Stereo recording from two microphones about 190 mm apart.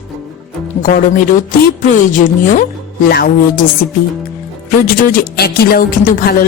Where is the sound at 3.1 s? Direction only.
55° left (ahead or behind).